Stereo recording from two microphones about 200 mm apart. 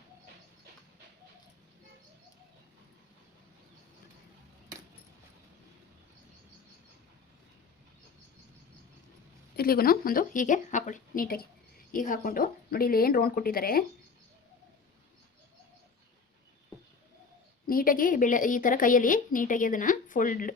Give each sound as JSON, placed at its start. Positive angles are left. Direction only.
{"t": 9.6, "sound": "speech", "side_deg": 50}
{"t": 17.7, "sound": "a woman's voice", "side_deg": 45}